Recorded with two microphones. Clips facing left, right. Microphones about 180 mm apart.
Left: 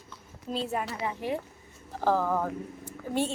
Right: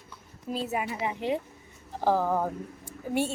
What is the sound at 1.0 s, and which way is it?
A woman's voice, 20° right (ahead or behind).